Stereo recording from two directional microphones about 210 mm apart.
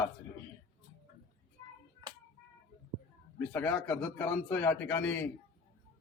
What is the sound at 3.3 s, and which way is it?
A man's voice, 10° left (ahead or behind).